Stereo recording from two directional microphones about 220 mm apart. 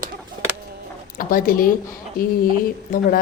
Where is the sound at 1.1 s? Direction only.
40° left (ahead or behind).